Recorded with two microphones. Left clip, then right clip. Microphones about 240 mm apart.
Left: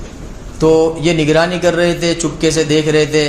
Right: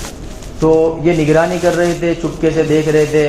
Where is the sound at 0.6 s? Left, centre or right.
Left.